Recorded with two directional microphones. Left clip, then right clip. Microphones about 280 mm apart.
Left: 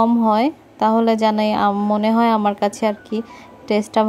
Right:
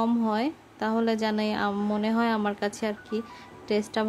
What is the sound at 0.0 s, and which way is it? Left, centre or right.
A woman's voice, centre.